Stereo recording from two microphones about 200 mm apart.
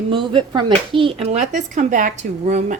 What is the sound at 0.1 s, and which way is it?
Speech, 25° right (ahead or behind).